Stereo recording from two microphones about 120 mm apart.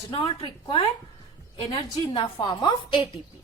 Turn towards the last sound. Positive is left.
turn(degrees=40)  # may be behind; listen again after turning